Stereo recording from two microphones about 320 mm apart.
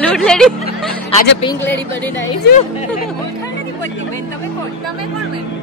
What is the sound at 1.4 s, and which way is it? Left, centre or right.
Speech, centre.